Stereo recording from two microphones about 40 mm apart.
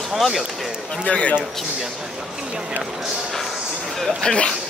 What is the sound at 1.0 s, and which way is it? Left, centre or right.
Speech, left.